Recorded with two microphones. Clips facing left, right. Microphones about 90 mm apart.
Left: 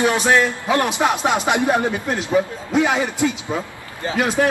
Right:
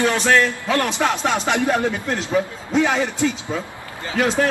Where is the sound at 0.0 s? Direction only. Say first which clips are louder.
Left 1 dB; 15° left (ahead or behind).